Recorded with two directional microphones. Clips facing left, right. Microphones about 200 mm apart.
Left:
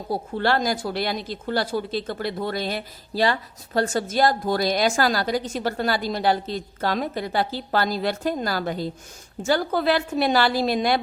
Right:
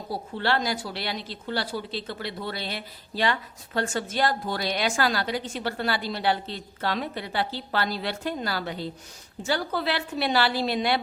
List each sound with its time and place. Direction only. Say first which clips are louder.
0.1 s a woman's voice: left 4 dB; 45° left (ahead or behind)